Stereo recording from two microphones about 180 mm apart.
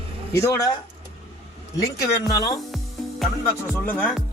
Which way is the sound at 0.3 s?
20° left (ahead or behind).